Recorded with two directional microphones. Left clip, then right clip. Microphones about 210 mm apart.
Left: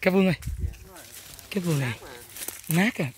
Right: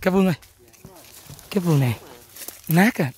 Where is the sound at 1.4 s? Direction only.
40° right (ahead or behind).